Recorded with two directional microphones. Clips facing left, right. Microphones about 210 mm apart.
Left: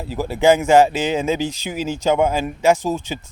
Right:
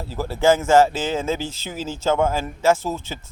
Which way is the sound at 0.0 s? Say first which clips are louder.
Left 3 dB; 15° left (ahead or behind).